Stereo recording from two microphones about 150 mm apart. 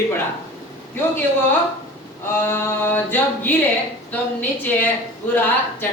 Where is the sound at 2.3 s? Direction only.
15° left (ahead or behind).